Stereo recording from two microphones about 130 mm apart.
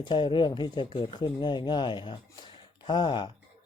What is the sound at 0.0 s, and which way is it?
Speech, 35° left (ahead or behind).